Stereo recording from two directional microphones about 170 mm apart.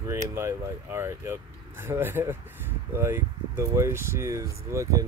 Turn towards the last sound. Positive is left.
turn(degrees=-20)  # may be behind; listen again after turning